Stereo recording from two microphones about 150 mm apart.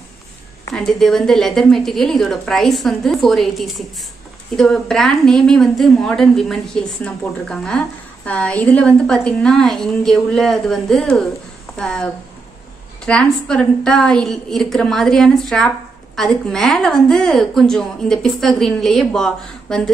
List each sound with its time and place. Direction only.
0.7 s a woman's voice: centre (ahead or behind)